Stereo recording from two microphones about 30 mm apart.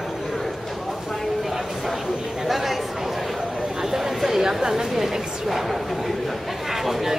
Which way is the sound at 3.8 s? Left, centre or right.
Centre.